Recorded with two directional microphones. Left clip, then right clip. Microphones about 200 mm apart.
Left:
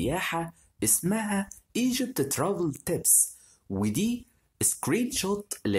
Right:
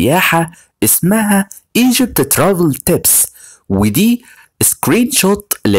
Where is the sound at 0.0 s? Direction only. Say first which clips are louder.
Right 18 dB; 40° right (ahead or behind).